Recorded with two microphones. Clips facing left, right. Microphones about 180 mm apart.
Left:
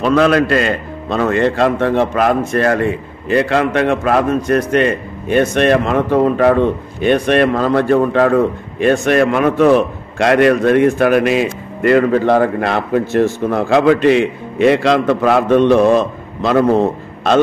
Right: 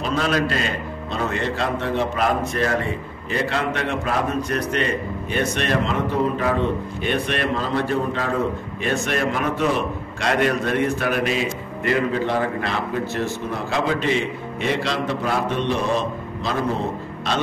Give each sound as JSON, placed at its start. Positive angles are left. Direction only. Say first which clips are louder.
{"t": 0.0, "sound": "a man's voice", "louder": "left 10 dB", "side_deg": 75}
{"t": 6.1, "sound": "a man's voice", "louder": "left 11 dB", "side_deg": 65}
{"t": 15.5, "sound": "a man's voice", "louder": "left 12 dB", "side_deg": 60}
{"t": 16.7, "sound": "a man's voice", "louder": "left 11 dB", "side_deg": 50}